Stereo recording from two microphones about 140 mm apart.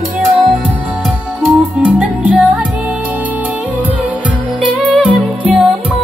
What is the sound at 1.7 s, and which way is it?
Music, 10° right (ahead or behind).